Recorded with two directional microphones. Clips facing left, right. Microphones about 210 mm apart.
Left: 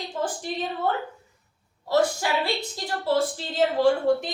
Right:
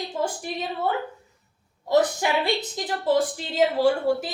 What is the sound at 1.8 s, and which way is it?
A woman's voice, 20° right (ahead or behind).